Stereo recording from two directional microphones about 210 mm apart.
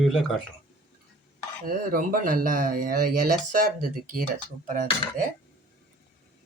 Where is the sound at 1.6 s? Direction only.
40° right (ahead or behind).